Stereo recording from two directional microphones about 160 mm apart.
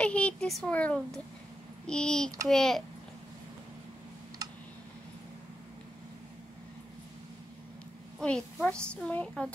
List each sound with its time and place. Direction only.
0.0 s a child's voice: 10° left (ahead or behind)
4.4 s tick: 20° right (ahead or behind)
8.2 s a woman's voice: 5° left (ahead or behind)